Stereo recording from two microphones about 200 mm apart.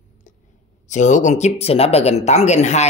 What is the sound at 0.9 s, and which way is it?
A man's voice, 35° left (ahead or behind).